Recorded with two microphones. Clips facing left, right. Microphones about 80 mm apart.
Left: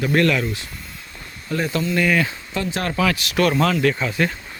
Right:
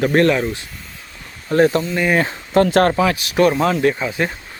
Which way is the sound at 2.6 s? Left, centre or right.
Right.